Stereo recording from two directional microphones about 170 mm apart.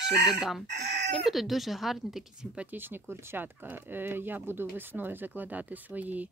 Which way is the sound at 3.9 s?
10° right (ahead or behind).